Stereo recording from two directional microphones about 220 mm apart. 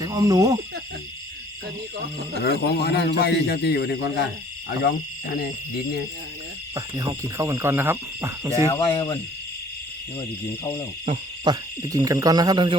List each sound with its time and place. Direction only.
0.0 s owl: 15° right (ahead or behind)
2.4 s a man's voice: 45° left (ahead or behind)
6.7 s cricket: 15° right (ahead or behind)
8.7 s speech: 20° left (ahead or behind)
10.2 s speech: 10° left (ahead or behind)
11.0 s cricket: 25° right (ahead or behind)